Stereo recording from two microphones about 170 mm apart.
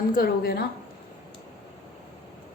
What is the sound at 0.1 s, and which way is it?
Speech, 60° left (ahead or behind).